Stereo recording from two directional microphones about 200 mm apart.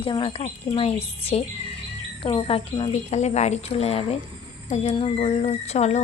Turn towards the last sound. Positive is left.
turn(degrees=35)  # may be behind; listen again after turning